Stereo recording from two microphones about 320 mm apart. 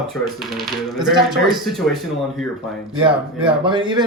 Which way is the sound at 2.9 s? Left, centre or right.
Centre.